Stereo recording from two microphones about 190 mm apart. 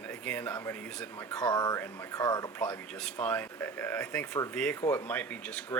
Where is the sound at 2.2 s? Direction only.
20° left (ahead or behind).